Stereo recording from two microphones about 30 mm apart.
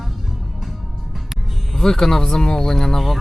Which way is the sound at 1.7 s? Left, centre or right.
Centre.